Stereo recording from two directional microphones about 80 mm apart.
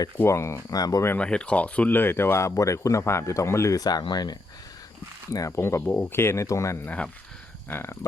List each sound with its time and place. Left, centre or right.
0.3 s speech: left
0.7 s speech: left
1.2 s speech: centre; by 4.4 s left
5.3 s speech: left
5.5 s speech: left
6.8 s speech: centre
7.7 s speech: left